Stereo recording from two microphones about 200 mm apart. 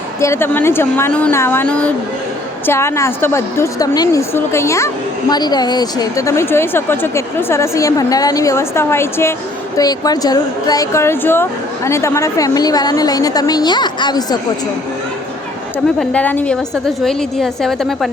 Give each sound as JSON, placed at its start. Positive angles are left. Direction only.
{"t": 0.2, "sound": "a woman's voice", "side_deg": 15}
{"t": 16.0, "sound": "a woman's voice", "side_deg": 5}